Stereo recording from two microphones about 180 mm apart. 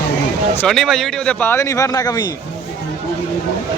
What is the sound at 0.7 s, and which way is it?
Speech, centre (ahead or behind).